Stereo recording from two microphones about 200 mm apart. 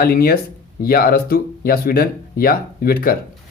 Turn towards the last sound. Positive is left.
turn(degrees=45)  # may be behind; listen again after turning